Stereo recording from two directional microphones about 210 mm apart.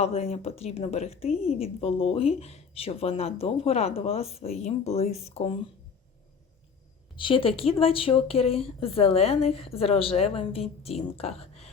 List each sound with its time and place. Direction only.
0.0 s a woman's voice: 30° left (ahead or behind)
7.2 s a woman's voice: 25° left (ahead or behind)